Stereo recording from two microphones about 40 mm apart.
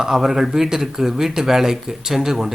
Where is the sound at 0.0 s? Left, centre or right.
Centre.